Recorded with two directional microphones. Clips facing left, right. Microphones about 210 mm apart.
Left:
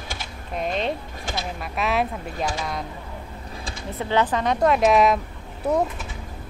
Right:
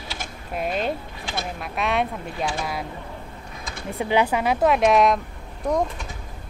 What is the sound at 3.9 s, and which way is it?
A woman's voice, 15° right (ahead or behind).